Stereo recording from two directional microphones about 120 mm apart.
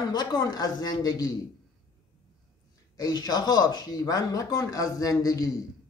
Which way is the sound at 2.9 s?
35° left (ahead or behind).